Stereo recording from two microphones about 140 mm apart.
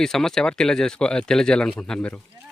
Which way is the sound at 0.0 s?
5° left (ahead or behind).